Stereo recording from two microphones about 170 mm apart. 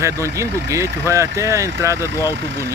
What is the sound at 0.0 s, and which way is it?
Speech, 15° right (ahead or behind).